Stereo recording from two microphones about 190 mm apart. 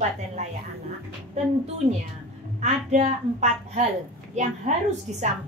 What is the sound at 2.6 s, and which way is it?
A woman's voice, 35° right (ahead or behind).